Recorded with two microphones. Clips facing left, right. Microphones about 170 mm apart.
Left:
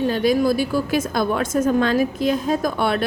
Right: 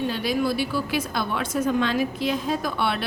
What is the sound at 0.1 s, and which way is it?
A woman's voice, 45° left (ahead or behind).